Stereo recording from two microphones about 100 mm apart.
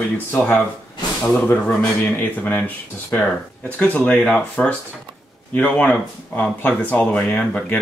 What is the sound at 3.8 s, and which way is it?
Speech, 15° left (ahead or behind).